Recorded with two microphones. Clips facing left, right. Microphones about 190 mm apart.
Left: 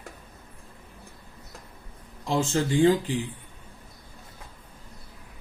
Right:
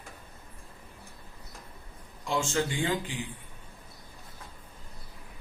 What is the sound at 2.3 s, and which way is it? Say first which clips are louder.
Speech: left 4 dB; 35° left (ahead or behind).